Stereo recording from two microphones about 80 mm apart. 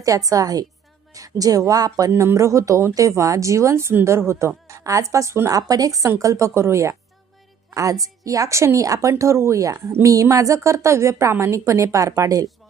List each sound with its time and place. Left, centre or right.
0.3 s a woman's voice: right